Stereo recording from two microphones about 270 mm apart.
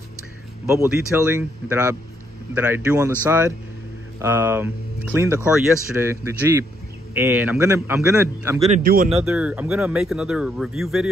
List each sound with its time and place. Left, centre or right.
0.7 s a man's voice: centre
4.2 s a man's voice: centre
8.7 s speech: right
9.2 s speech: centre